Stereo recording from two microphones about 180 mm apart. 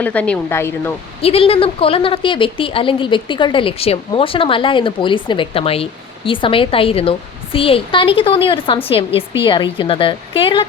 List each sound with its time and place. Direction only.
0.0 s speech: 10° left (ahead or behind)
1.2 s a woman's voice: 35° left (ahead or behind)